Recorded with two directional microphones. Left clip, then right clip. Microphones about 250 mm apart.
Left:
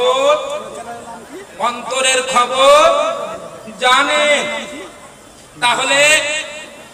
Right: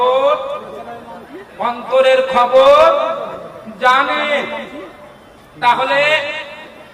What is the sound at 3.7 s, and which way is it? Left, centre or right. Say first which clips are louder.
Speech: even; left.